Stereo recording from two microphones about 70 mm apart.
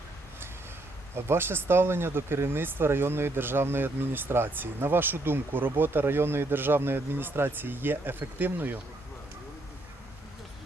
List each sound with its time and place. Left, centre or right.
1.1 s speech: right